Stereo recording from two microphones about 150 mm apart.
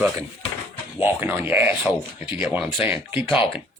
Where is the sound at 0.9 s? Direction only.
10° right (ahead or behind).